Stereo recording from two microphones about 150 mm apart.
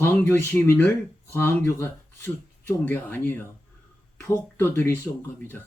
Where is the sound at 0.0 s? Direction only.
15° left (ahead or behind).